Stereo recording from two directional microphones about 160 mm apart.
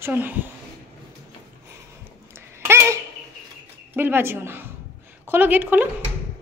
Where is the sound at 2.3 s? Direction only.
15° right (ahead or behind).